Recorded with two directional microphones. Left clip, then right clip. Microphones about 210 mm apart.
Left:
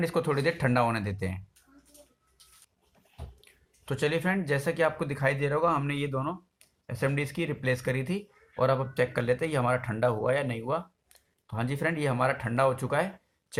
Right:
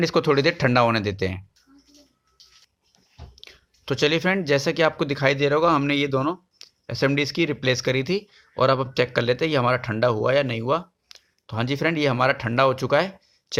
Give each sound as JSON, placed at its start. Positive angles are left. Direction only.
{"t": 0.0, "sound": "speech", "side_deg": -35}
{"t": 3.4, "sound": "speech", "side_deg": -40}